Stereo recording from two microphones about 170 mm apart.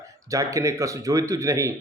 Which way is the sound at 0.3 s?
20° right (ahead or behind).